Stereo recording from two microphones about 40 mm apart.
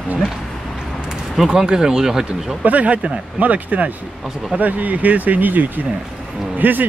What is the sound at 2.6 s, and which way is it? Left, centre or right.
Speech, right.